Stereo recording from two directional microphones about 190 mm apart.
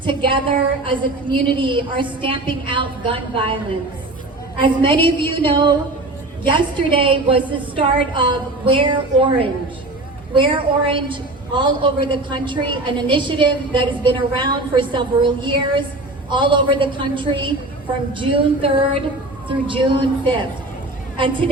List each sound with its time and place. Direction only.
0.0 s a woman's voice: 25° right (ahead or behind)
4.6 s a woman's voice: 25° right (ahead or behind)